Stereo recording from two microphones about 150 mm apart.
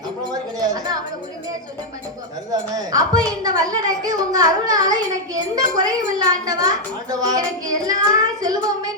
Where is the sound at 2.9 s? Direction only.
25° right (ahead or behind).